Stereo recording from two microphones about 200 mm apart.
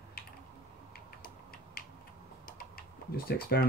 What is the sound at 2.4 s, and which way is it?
Typing, 45° left (ahead or behind).